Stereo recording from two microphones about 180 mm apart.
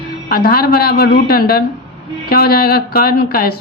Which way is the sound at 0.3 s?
55° left (ahead or behind).